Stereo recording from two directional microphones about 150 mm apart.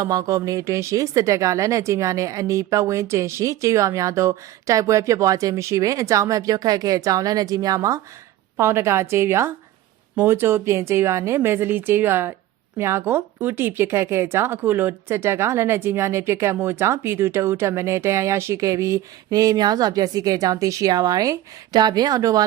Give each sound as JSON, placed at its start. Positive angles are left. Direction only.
{"t": 0.0, "sound": "speech", "side_deg": -25}